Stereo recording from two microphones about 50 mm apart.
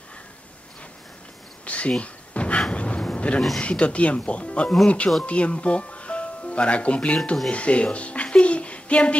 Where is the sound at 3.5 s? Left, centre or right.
Left.